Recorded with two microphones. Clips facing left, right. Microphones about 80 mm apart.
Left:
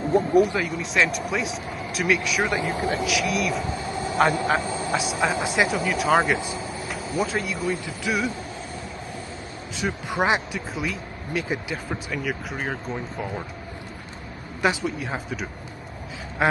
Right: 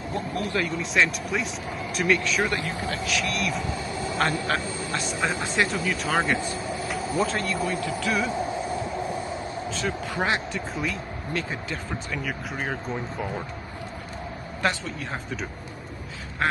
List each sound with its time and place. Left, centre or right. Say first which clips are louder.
0.4 s speech: left 6 dB; centre
3.1 s speech: left 3 dB; centre
7.8 s speech: right 1 dB; centre
9.8 s speech: left 4 dB; centre
10.5 s speech: even; centre
14.6 s speech: left 4 dB; centre